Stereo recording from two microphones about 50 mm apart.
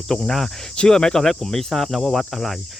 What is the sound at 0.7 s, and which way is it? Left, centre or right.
Speech, centre.